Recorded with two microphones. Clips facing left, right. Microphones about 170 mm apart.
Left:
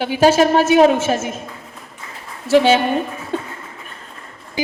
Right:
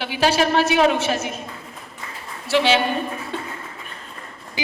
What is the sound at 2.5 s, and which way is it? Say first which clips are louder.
Speech: left 6 dB; 45° left (ahead or behind).